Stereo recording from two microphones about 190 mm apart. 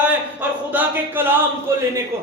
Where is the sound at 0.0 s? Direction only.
10° right (ahead or behind).